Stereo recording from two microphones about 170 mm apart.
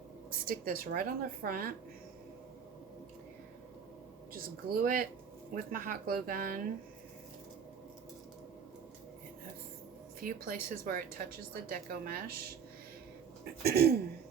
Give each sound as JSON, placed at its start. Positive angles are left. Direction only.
{"t": 0.3, "sound": "speech", "side_deg": -60}
{"t": 4.4, "sound": "speech", "side_deg": -60}
{"t": 10.2, "sound": "speech", "side_deg": -55}
{"t": 13.6, "sound": "a sound", "side_deg": -65}